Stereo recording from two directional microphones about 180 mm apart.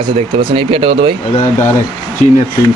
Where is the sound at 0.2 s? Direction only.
30° right (ahead or behind).